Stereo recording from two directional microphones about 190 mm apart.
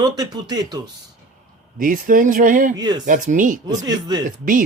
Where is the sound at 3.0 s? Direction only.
40° right (ahead or behind).